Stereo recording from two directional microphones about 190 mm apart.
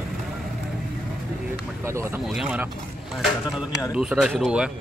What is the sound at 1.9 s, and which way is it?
Speech, 15° right (ahead or behind).